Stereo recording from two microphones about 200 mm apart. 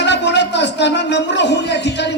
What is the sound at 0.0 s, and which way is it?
A man's voice, 60° left (ahead or behind).